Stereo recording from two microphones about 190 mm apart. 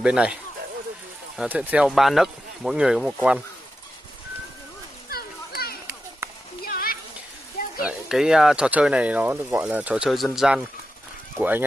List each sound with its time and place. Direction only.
0.0 s speech: 5° right (ahead or behind)
5.1 s children playing: 55° left (ahead or behind)
6.6 s a sound: 50° left (ahead or behind)
7.8 s speech: 5° right (ahead or behind)